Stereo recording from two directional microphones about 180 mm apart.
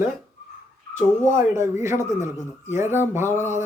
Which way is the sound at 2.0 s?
40° left (ahead or behind).